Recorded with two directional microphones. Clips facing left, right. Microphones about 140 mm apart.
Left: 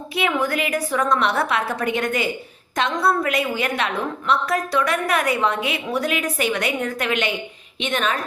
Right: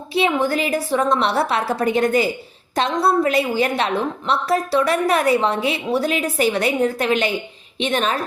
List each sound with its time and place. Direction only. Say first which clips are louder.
0.1 s a woman's voice: right 4 dB; 30° right (ahead or behind)